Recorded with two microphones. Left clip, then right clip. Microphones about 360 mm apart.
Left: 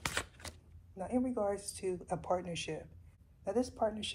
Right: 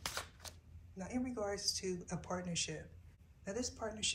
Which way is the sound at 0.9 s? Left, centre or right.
Centre.